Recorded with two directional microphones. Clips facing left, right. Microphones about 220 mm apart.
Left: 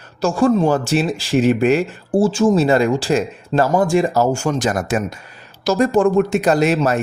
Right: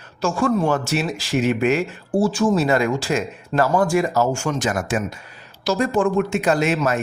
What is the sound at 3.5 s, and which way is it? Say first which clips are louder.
Speech: left 2 dB; 20° left (ahead or behind).